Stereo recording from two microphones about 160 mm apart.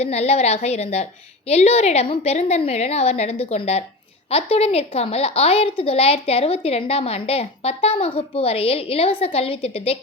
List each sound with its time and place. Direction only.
0.0 s a woman's voice: 40° left (ahead or behind)